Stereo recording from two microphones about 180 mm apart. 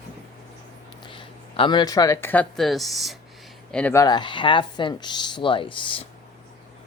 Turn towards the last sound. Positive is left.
turn(degrees=30)  # may be behind; listen again after turning